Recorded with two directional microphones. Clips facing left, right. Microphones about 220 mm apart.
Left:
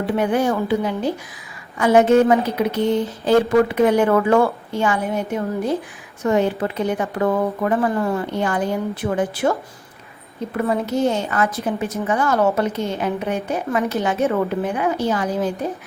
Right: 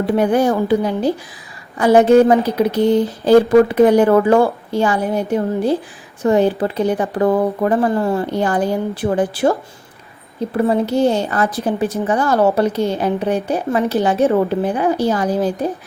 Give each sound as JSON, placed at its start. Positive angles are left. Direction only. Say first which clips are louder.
{"t": 0.0, "sound": "a woman's voice", "louder": "right 4 dB", "side_deg": -35}